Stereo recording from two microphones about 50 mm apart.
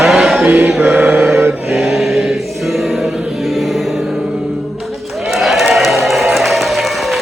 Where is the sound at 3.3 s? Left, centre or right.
Centre.